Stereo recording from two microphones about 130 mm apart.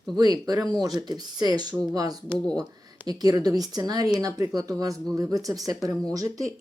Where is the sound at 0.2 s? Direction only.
30° right (ahead or behind).